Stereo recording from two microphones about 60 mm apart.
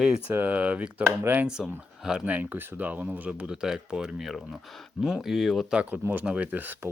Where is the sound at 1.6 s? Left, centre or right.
Centre.